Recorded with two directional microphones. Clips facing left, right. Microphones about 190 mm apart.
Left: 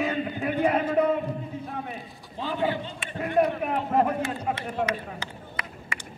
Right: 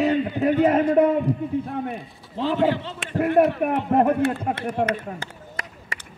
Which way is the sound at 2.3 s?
90° right.